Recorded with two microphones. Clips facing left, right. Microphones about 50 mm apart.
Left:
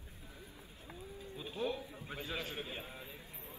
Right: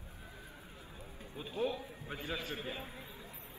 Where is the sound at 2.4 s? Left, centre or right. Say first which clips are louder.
Right 2 dB; right.